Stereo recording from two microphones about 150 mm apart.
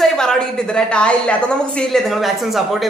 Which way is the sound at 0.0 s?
5° left (ahead or behind).